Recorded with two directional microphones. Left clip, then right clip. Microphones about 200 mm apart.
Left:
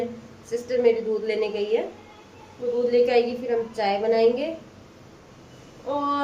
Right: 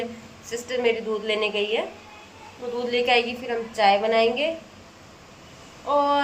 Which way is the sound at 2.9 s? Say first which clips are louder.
Even; 5° left (ahead or behind).